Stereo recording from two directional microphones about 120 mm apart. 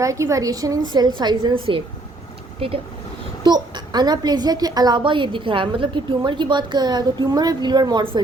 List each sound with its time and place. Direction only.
0.0 s a woman's voice: 25° right (ahead or behind); by 2.8 s 50° right (ahead or behind)
3.4 s a woman's voice: 35° right (ahead or behind)